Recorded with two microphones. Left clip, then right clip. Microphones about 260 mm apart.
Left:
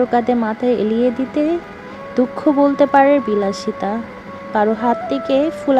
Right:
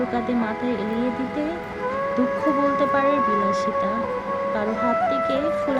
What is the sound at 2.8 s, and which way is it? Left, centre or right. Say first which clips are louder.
Speech: left 7 dB; left.